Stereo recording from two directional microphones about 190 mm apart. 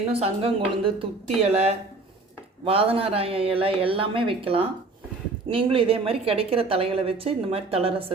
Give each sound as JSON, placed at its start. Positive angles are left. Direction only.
{"t": 0.1, "sound": "a woman's voice", "side_deg": -30}